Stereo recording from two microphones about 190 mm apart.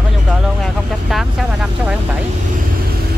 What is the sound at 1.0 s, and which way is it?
Speech, 5° right (ahead or behind).